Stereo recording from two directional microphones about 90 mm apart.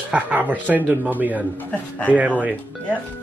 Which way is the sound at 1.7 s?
15° left (ahead or behind).